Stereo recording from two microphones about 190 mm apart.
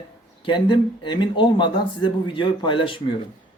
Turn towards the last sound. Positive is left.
turn(degrees=25)  # may be behind; listen again after turning